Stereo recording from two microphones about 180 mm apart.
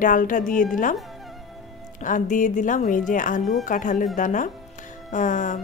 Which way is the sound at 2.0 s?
45° left (ahead or behind).